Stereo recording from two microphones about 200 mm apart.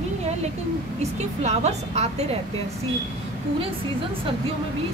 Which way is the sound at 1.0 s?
35° right (ahead or behind).